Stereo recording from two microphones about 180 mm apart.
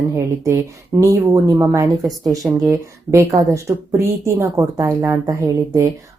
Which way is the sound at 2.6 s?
15° right (ahead or behind).